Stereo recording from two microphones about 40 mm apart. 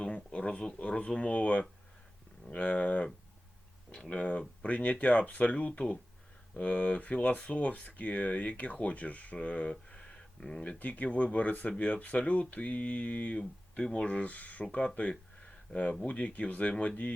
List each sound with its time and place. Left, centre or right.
0.0 s speech: left
4.1 s speech: left
10.7 s speech: left
13.4 s speech: centre
13.9 s speech: left
14.6 s speech: left